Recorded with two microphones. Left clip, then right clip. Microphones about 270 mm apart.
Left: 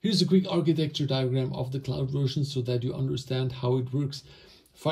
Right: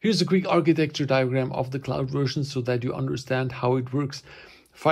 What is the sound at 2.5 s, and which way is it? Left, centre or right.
Speech, centre.